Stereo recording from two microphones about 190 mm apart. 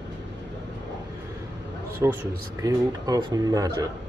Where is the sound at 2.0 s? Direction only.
15° right (ahead or behind).